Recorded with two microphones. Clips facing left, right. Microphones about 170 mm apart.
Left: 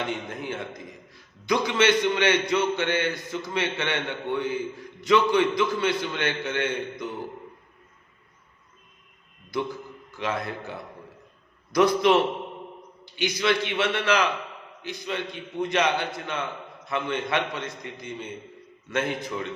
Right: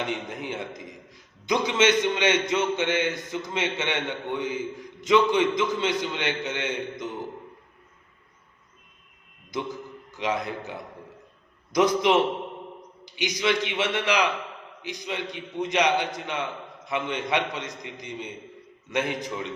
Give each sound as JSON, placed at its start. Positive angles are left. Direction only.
{"t": 0.1, "sound": "a man's voice", "side_deg": -15}
{"t": 9.5, "sound": "a man's voice", "side_deg": -20}